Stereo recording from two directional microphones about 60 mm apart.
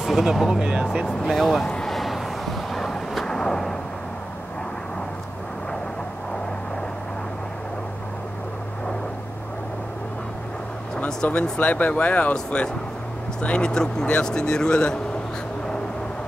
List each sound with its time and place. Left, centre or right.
0.0 s speech: centre
1.0 s speech: centre
1.9 s vehicle: centre
11.4 s speech: centre